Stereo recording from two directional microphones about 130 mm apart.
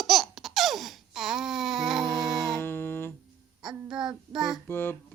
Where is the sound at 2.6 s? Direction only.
15° left (ahead or behind).